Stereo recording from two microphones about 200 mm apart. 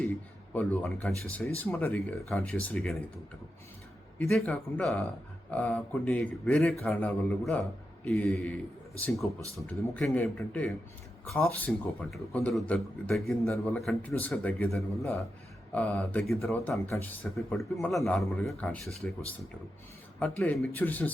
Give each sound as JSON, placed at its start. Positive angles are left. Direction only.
{"t": 0.1, "sound": "a man's voice", "side_deg": 10}
{"t": 4.2, "sound": "a man's voice", "side_deg": 5}
{"t": 20.1, "sound": "speech", "side_deg": 5}